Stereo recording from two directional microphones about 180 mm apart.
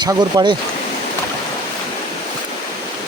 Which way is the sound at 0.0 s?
20° right (ahead or behind).